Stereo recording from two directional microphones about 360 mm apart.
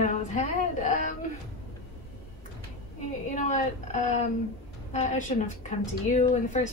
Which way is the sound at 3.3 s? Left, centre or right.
Centre.